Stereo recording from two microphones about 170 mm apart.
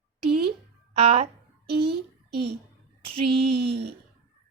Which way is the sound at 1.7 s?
70° right (ahead or behind).